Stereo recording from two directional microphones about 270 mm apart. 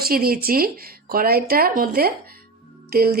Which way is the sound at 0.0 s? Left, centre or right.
Right.